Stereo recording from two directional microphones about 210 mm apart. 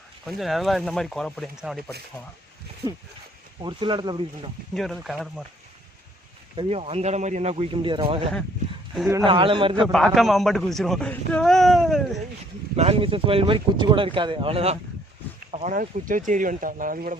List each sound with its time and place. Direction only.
0.3 s a man's voice: centre (ahead or behind)
3.6 s speech: 20° right (ahead or behind)
4.7 s a man's voice: centre (ahead or behind)
6.6 s speech: 30° right (ahead or behind)
9.8 s a man's voice: centre (ahead or behind)
12.7 s speech: 30° right (ahead or behind)
15.5 s speech: 40° right (ahead or behind)